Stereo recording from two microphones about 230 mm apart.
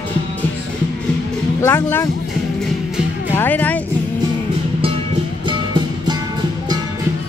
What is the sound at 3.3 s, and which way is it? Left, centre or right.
Music, centre.